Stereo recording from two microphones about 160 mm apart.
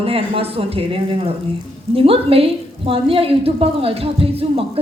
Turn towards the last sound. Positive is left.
turn(degrees=-35)  # may be behind; listen again after turning